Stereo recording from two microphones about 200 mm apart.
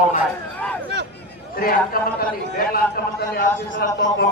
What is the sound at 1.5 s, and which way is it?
A man's voice, 45° left (ahead or behind).